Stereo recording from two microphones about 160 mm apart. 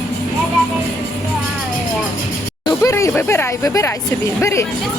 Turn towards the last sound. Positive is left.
turn(degrees=20)  # may be behind; listen again after turning